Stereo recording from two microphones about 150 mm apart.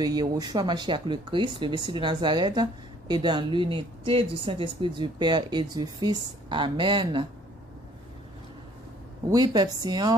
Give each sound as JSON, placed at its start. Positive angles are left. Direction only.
{"t": 0.0, "sound": "speech", "side_deg": -25}
{"t": 9.3, "sound": "speech", "side_deg": -25}